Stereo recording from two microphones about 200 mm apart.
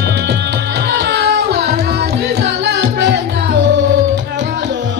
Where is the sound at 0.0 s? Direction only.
55° right (ahead or behind).